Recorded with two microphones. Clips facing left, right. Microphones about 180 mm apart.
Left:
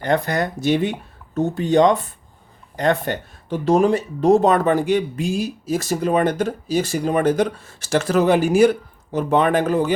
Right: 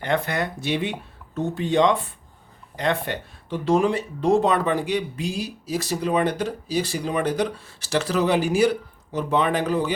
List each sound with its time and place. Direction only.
0.0 s speech: 40° left (ahead or behind)